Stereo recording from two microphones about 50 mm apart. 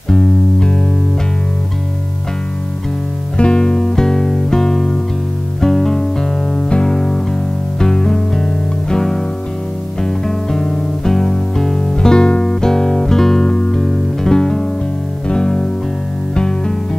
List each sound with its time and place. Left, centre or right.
0.1 s music: centre
3.3 s music: centre